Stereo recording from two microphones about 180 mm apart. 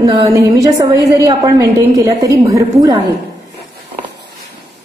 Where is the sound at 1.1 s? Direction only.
15° right (ahead or behind).